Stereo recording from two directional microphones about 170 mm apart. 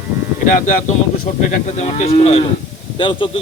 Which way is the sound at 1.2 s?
50° left (ahead or behind).